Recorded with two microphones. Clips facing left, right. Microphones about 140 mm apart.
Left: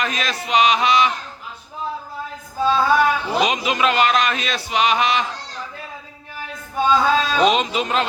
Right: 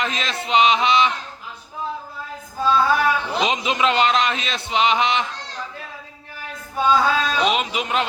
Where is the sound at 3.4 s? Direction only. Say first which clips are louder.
Left 1 dB; 25° right (ahead or behind).